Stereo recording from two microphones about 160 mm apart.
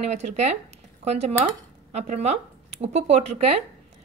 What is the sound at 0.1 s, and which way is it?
A woman's voice, 45° right (ahead or behind).